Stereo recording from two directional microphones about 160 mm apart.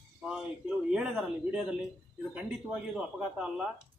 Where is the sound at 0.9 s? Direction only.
5° right (ahead or behind).